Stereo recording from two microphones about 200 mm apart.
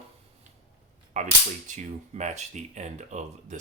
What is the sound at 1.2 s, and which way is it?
Speech, 35° right (ahead or behind).